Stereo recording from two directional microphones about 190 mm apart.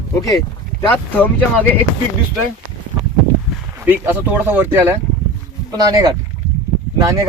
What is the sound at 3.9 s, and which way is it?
Speech, 10° right (ahead or behind).